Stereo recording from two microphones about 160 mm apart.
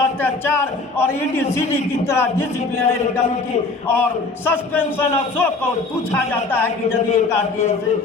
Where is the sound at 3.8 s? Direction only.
15° left (ahead or behind).